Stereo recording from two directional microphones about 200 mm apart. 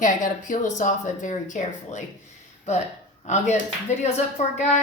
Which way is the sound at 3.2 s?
35° left (ahead or behind).